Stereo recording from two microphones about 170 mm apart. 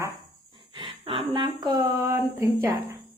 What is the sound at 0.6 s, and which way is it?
Speech, 30° right (ahead or behind).